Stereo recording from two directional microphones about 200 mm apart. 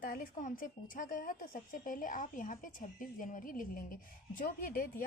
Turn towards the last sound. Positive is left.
turn(degrees=45)  # may be behind; listen again after turning